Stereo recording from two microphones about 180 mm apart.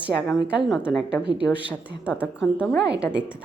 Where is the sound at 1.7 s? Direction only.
10° left (ahead or behind).